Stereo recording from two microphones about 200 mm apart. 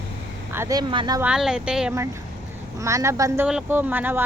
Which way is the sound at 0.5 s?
15° right (ahead or behind).